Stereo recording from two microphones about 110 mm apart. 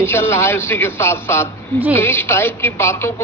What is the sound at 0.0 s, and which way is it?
A woman's voice, 20° left (ahead or behind).